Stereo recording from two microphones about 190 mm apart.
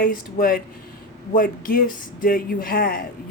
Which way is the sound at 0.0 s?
50° left (ahead or behind).